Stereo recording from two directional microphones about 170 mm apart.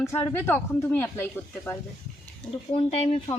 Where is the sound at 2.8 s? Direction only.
35° left (ahead or behind).